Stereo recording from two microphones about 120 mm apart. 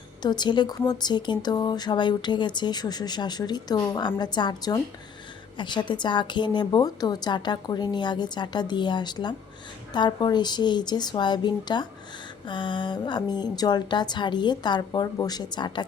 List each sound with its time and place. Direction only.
0.2 s speech: 35° left (ahead or behind)